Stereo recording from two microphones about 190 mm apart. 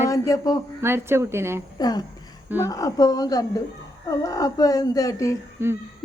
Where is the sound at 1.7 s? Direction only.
20° left (ahead or behind).